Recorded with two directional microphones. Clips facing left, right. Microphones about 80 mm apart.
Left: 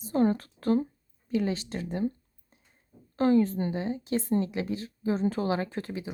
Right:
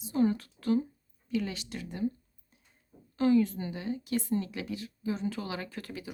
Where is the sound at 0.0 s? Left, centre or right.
Left.